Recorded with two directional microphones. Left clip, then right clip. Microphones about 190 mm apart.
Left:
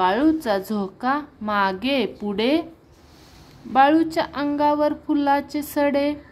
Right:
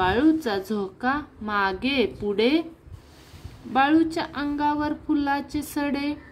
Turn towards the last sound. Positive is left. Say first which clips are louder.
# left 7 dB
turn(degrees=20)  # may be behind; listen again after turning